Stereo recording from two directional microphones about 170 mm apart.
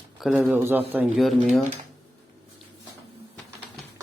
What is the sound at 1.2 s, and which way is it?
Speech, centre (ahead or behind).